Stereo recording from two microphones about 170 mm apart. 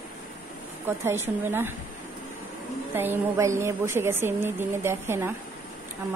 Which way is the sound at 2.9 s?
10° right (ahead or behind).